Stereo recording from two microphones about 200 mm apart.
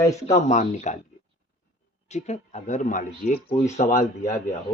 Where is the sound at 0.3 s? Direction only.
35° left (ahead or behind).